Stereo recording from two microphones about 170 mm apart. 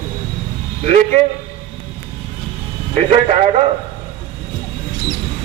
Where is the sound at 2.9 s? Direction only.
40° right (ahead or behind).